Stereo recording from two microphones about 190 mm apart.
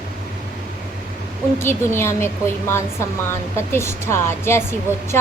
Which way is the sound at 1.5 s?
15° left (ahead or behind).